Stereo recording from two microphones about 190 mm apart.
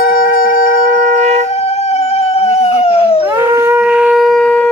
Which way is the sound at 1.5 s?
35° left (ahead or behind).